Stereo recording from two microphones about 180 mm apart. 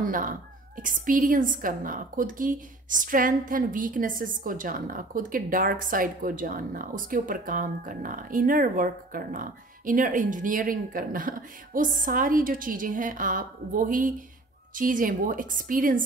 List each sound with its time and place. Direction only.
0.0 s a woman's voice: 50° right (ahead or behind)